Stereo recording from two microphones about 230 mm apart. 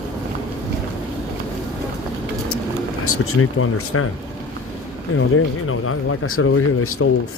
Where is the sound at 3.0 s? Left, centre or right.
Left.